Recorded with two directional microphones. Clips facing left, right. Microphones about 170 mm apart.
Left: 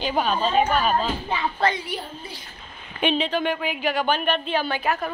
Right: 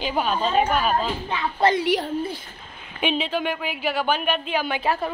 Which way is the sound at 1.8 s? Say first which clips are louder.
Right 10 dB; 90° right.